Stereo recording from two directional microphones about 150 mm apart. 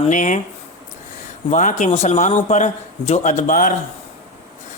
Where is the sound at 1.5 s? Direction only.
55° left (ahead or behind).